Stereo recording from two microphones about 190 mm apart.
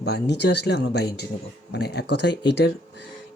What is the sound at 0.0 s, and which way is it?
Speech, 65° left (ahead or behind).